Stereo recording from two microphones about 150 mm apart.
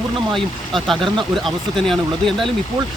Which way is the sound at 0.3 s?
Centre (ahead or behind).